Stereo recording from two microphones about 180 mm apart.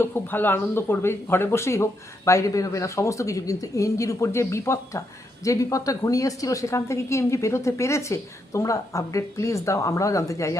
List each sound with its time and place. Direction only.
0.0 s a woman's voice: 10° left (ahead or behind)